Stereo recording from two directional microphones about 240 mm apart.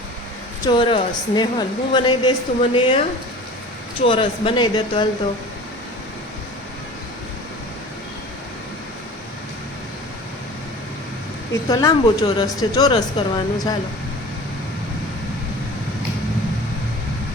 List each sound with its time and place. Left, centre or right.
0.6 s a woman's voice: centre
4.0 s a woman's voice: left
11.7 s speech: centre